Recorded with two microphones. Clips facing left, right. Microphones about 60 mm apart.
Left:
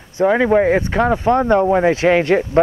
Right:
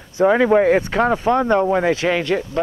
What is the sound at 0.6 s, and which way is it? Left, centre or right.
Speech, left.